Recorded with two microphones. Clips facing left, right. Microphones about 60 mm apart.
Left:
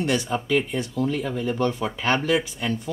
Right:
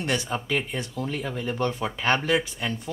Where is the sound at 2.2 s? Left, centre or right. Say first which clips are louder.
Left 2 dB; right.